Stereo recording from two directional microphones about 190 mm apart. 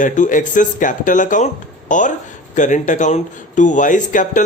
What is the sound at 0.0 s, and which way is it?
Speech, 40° left (ahead or behind).